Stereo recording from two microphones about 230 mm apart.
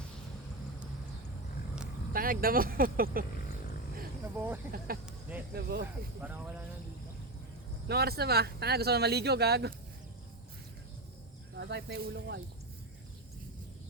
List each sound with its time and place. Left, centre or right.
2.1 s speech: right
4.4 s speech: centre
4.9 s speech: right
7.9 s speech: right
11.5 s speech: right